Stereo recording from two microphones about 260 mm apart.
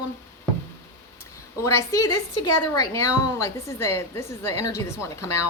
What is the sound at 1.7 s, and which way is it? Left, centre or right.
Speech, centre.